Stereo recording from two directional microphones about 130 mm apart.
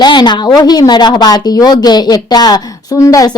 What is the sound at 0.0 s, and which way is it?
Speech, 35° left (ahead or behind).